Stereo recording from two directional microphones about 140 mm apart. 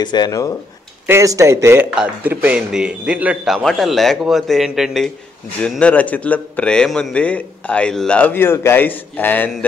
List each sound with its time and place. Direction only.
0.0 s speech: 30° left (ahead or behind)
1.0 s speech: 20° right (ahead or behind)
3.5 s a man's voice: centre (ahead or behind)